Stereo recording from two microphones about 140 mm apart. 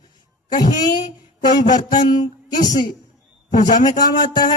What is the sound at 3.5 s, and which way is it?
Speech, 65° left (ahead or behind).